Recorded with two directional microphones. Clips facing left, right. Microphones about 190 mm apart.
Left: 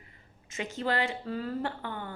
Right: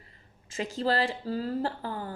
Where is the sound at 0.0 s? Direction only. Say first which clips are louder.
Even; 35° right (ahead or behind).